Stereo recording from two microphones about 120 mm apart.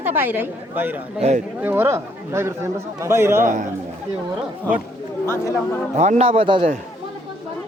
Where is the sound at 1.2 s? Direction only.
60° right (ahead or behind).